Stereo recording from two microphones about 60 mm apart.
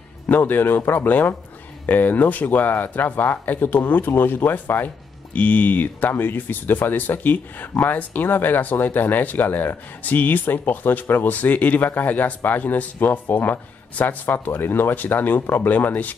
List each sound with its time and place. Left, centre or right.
0.3 s speech: left